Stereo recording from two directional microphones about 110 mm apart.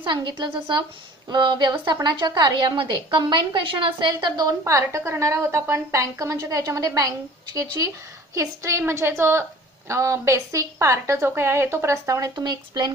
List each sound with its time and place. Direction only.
0.0 s a woman's voice: 45° right (ahead or behind)